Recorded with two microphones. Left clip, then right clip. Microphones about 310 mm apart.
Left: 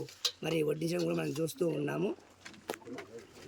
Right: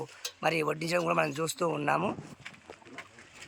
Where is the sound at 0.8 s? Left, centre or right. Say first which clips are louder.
Right 6 dB; centre.